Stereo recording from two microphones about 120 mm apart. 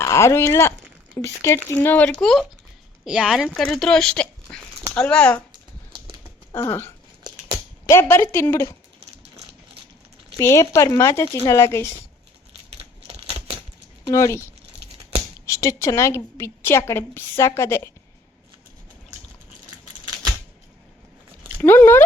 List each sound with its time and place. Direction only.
0.0 s a woman's voice: 25° left (ahead or behind); by 5.4 s 10° left (ahead or behind)
6.5 s a sound: 20° left (ahead or behind)
7.9 s a woman's voice: 20° left (ahead or behind)
10.3 s a woman's voice: 25° left (ahead or behind)
14.1 s a woman's voice: 25° left (ahead or behind)
15.4 s a woman's voice: 25° left (ahead or behind)
21.6 s a sound: 15° left (ahead or behind)